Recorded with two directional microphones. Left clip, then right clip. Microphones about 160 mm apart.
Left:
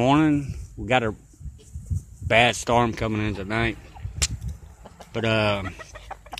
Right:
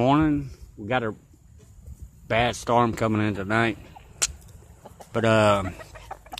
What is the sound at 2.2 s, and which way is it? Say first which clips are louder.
Speech: left 4 dB; 10° left (ahead or behind).